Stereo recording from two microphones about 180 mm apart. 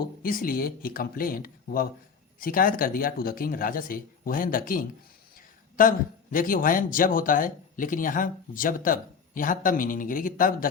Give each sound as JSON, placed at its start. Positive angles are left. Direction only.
{"t": 0.2, "sound": "speech", "side_deg": 55}